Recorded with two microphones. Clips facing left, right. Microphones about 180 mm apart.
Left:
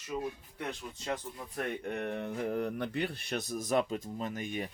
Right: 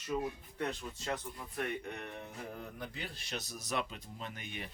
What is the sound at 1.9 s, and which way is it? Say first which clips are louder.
A man's voice: left 9 dB; 60° left (ahead or behind).